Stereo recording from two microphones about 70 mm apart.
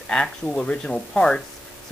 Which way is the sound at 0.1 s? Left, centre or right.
Centre.